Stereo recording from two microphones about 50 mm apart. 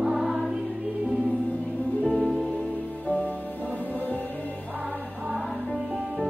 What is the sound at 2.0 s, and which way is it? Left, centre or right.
Music, left.